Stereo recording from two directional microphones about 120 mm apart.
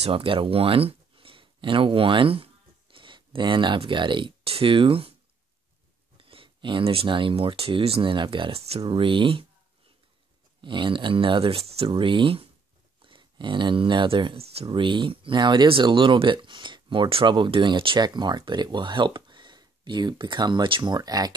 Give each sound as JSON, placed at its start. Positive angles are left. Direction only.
{"t": 0.0, "sound": "speech", "side_deg": -50}
{"t": 6.1, "sound": "speech", "side_deg": -45}
{"t": 10.6, "sound": "speech", "side_deg": -40}